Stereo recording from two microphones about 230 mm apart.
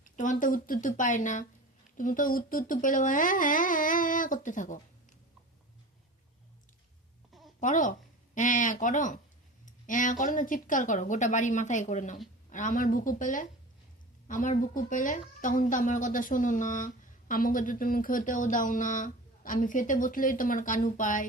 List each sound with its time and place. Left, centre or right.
0.0 s speech: left
7.6 s speech: left